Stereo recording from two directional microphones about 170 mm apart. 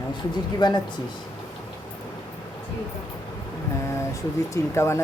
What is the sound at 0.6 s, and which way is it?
Speech, 25° left (ahead or behind).